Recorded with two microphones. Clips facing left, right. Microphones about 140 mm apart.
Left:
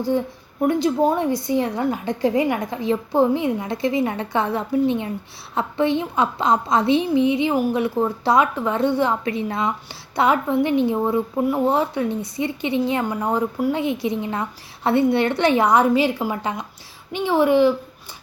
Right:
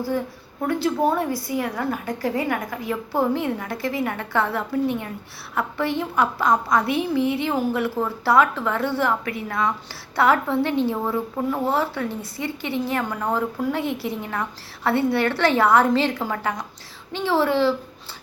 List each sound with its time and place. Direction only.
0.6 s a woman's voice: 20° left (ahead or behind)